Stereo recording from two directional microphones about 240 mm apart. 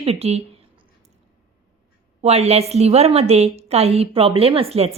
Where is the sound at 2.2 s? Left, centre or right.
Right.